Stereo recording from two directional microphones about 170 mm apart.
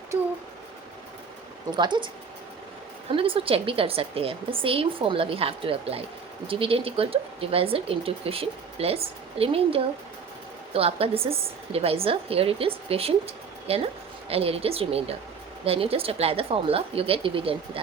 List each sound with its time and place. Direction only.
1.7 s speech: 25° right (ahead or behind)
3.1 s speech: 30° right (ahead or behind)